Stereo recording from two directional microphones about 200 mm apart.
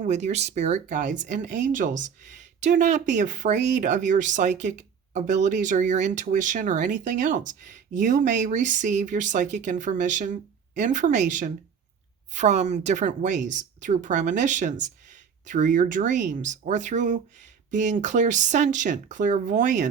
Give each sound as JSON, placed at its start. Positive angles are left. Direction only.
{"t": 0.0, "sound": "speech", "side_deg": -35}